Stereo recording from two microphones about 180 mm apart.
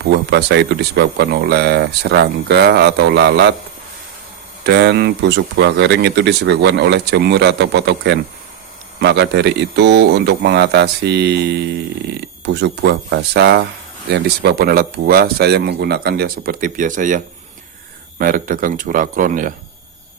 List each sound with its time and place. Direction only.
0.1 s speech: 65° right (ahead or behind)
4.6 s speech: 70° right (ahead or behind); by 19.5 s 45° right (ahead or behind)